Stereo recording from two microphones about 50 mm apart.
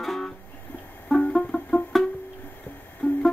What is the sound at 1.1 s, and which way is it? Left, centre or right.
Banjo, centre.